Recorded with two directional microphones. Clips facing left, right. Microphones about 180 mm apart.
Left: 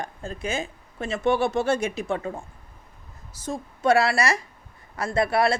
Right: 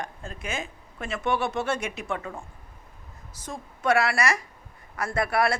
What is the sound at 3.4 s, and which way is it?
A woman's voice, 25° left (ahead or behind).